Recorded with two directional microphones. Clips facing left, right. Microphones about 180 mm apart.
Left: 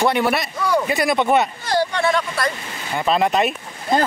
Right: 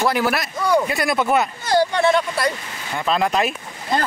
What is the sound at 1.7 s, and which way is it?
Speech, 25° right (ahead or behind).